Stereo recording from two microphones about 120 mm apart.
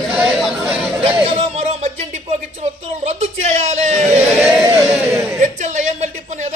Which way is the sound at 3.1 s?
65° right (ahead or behind).